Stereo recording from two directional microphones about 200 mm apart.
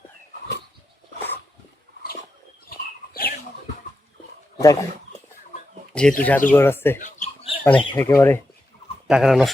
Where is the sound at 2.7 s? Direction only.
50° left (ahead or behind).